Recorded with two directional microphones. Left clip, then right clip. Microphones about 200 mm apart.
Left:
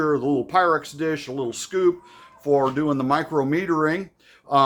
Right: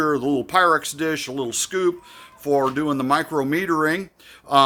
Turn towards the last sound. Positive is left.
turn(degrees=-25)  # may be behind; listen again after turning